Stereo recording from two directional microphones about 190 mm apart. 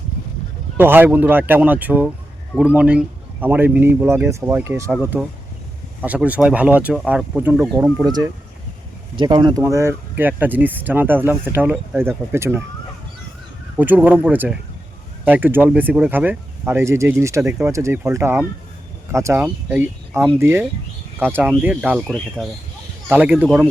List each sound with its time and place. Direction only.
0.8 s speech: 10° right (ahead or behind)
6.0 s speech: 5° right (ahead or behind)
8.0 s speech: 20° right (ahead or behind)
13.7 s speech: 10° right (ahead or behind)